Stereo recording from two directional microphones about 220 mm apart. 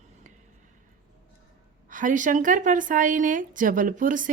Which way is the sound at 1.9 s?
35° right (ahead or behind).